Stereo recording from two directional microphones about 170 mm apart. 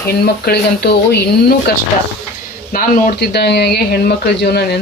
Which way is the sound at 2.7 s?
55° left (ahead or behind).